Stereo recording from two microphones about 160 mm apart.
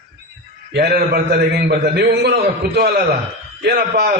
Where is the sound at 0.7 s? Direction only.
85° right.